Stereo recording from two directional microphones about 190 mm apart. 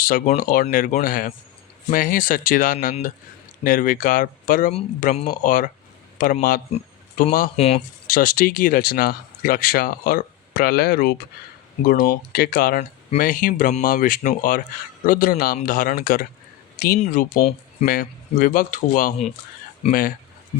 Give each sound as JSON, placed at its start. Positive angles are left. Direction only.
{"t": 0.1, "sound": "speech", "side_deg": 45}